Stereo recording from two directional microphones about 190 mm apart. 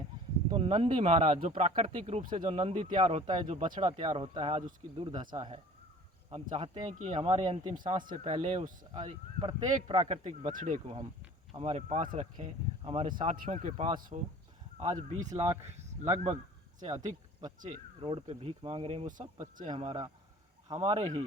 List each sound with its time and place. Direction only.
0.5 s speech: 30° right (ahead or behind)
8.8 s speech: 20° right (ahead or behind)
10.5 s speech: 45° right (ahead or behind)
11.5 s speech: 35° right (ahead or behind)
13.3 s speech: 45° right (ahead or behind)
15.7 s a sound: 35° right (ahead or behind)
18.0 s speech: 30° right (ahead or behind)